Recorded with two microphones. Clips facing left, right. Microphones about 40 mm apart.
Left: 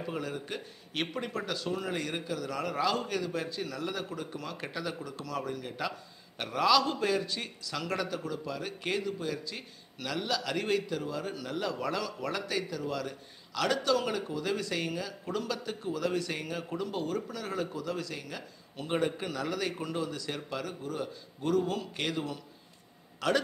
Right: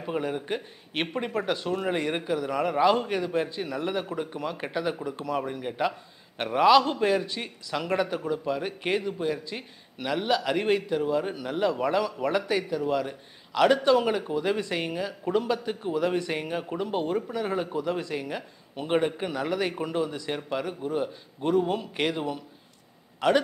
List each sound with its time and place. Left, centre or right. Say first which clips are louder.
0.0 s speech: right 6 dB; right